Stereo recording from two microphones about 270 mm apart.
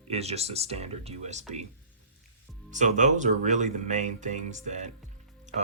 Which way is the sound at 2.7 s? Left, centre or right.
Right.